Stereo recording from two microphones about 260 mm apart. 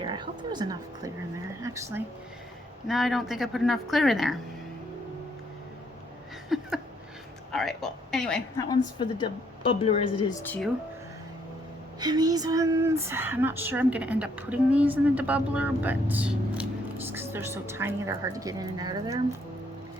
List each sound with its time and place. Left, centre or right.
0.0 s speech: centre
6.5 s speech: centre
8.7 s a woman's voice: centre
10.4 s speech: centre
11.9 s speech: centre